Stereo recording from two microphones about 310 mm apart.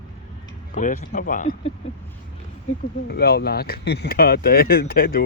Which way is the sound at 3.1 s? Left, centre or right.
Left.